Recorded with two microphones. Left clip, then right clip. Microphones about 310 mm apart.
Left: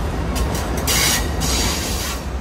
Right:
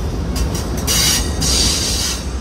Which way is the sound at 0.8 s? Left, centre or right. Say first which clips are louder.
Right 2 dB; left.